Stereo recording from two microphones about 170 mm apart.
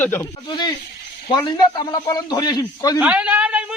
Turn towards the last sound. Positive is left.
turn(degrees=-5)  # may be behind; listen again after turning